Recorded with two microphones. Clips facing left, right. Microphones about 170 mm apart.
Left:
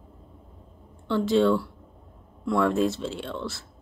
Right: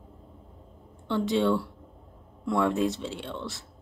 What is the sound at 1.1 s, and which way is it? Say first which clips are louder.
Speech: left 3 dB; 15° right (ahead or behind).